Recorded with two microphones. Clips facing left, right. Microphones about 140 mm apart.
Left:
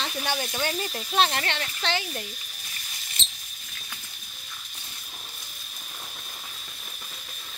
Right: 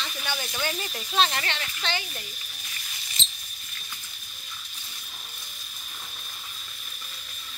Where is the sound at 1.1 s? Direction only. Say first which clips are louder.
Left 1 dB; 50° left (ahead or behind).